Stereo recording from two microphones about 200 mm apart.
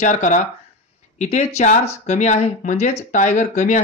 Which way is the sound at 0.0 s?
40° left (ahead or behind).